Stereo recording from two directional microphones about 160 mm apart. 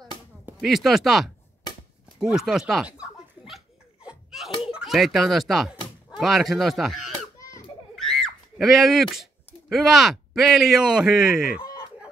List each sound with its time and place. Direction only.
0.5 s speech: centre (ahead or behind)
2.1 s a sound: 5° right (ahead or behind)
4.6 s speech: 5° right (ahead or behind)
7.3 s children playing: 20° left (ahead or behind)
7.9 s a sound: centre (ahead or behind)
9.7 s speech: centre (ahead or behind)